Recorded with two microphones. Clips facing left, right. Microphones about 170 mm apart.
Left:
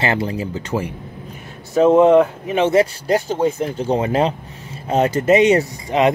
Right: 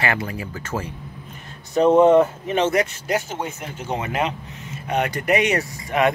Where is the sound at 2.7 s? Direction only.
30° left (ahead or behind).